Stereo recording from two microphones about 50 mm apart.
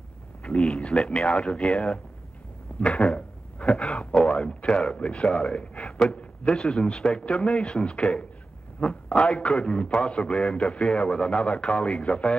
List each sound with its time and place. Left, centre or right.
0.4 s a man's voice: centre
1.7 s speech: centre
2.8 s a man's voice: left
3.2 s a sound: left
3.7 s speech: centre
4.3 s a man's voice: left
12.0 s a man's voice: left